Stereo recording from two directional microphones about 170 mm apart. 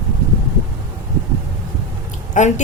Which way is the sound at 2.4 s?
45° left (ahead or behind).